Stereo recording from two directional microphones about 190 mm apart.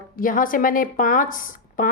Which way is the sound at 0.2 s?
45° left (ahead or behind).